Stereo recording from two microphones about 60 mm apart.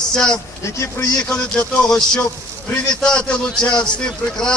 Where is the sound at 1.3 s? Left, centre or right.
Centre.